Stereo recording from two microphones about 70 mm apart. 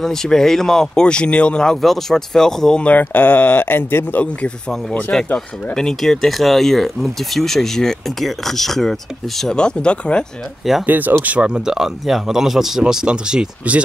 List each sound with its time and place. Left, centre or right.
0.0 s speech: centre
2.8 s speech: left
4.2 s speech: centre
5.1 s speech: centre
10.9 s speech: right